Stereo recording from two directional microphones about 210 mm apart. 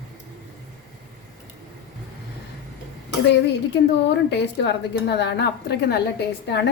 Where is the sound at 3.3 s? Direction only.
55° left (ahead or behind).